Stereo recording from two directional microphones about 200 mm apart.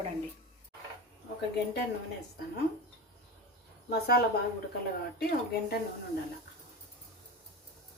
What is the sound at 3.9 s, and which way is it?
Speech, 55° left (ahead or behind).